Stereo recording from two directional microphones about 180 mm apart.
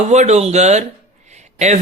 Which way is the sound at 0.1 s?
40° right (ahead or behind).